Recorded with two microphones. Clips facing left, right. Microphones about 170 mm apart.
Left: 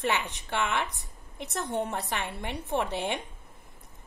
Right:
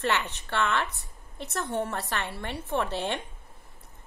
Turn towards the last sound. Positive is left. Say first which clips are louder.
# even
turn(degrees=15)  # may be behind; listen again after turning